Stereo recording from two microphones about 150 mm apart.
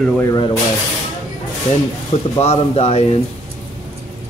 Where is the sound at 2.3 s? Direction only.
45° left (ahead or behind).